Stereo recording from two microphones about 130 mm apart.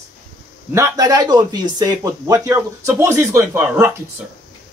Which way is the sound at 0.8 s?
25° right (ahead or behind).